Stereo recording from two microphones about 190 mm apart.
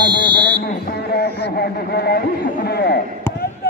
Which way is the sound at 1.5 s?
55° left (ahead or behind).